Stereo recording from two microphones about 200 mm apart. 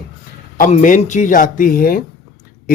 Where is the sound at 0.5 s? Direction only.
40° left (ahead or behind).